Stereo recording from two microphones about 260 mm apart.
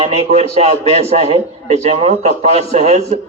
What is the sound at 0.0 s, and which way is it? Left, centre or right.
Speech, right.